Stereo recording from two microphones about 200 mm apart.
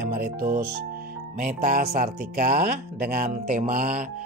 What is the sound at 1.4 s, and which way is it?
Speech, 40° right (ahead or behind).